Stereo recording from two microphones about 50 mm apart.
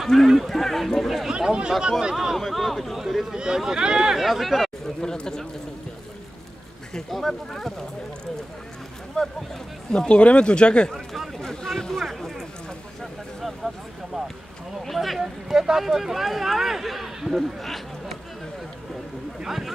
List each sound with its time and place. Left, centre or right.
0.0 s speech: centre
1.3 s speech: centre
2.3 s speech: centre
5.0 s speech: centre
6.9 s speech: centre
9.2 s speech: centre
11.3 s boat: centre
11.8 s a sound: centre
13.0 s vehicle: centre
14.8 s speech: centre
19.4 s speech: centre